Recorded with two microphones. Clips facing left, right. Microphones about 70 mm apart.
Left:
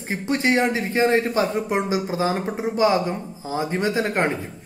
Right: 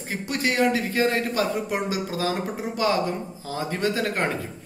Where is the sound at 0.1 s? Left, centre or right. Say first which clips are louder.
Left 5 dB; left.